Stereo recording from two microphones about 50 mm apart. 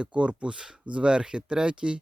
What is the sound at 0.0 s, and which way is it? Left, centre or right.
Speech, right.